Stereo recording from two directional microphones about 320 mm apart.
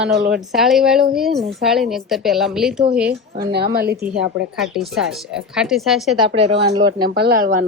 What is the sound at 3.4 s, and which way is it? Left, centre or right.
Speech, right.